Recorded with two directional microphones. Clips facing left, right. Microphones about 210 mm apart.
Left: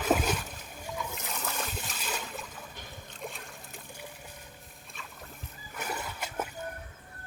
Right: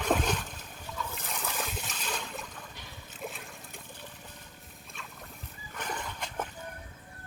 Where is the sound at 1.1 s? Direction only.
Centre (ahead or behind).